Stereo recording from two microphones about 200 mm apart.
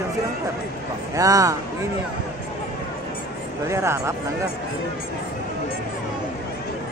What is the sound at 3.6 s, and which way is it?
Speech, 15° right (ahead or behind).